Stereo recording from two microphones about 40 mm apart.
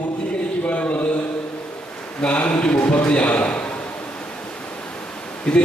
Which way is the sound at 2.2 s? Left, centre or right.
Left.